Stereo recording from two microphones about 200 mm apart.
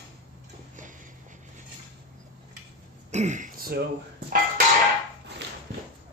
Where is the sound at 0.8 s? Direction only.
40° right (ahead or behind).